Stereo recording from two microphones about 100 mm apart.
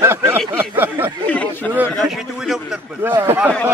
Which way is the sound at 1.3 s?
15° left (ahead or behind).